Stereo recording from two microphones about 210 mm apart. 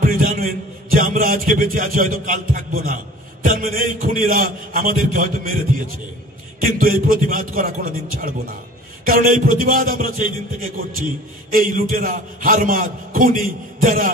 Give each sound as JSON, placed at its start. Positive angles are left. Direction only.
{"t": 0.0, "sound": "a sound", "side_deg": -40}
{"t": 0.9, "sound": "a man's voice", "side_deg": -40}
{"t": 11.5, "sound": "a man's voice", "side_deg": -40}